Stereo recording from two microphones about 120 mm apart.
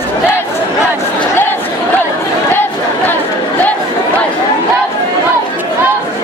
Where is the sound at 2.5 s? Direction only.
20° left (ahead or behind).